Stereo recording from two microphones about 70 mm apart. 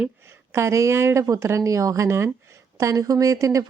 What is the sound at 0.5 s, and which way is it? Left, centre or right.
Speech, right.